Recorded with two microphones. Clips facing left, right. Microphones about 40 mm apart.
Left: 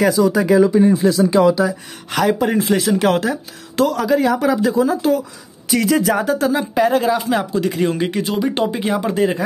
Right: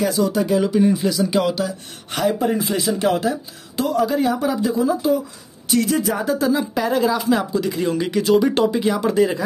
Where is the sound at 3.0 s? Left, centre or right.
Left.